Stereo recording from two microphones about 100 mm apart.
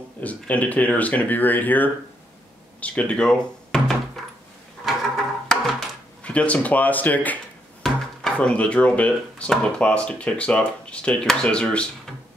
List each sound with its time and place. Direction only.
0.2 s speech: 15° left (ahead or behind)
4.8 s a sound: centre (ahead or behind)
6.2 s speech: 15° left (ahead or behind)